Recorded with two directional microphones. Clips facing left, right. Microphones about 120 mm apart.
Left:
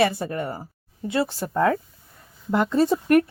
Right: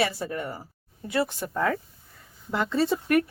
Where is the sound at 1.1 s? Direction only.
30° left (ahead or behind).